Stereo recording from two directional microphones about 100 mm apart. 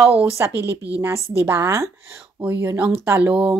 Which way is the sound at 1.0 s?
20° right (ahead or behind).